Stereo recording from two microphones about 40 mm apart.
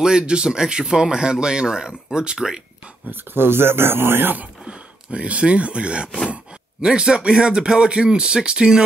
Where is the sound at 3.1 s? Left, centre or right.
Right.